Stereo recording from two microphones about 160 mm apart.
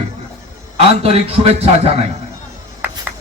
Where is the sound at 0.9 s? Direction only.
40° right (ahead or behind).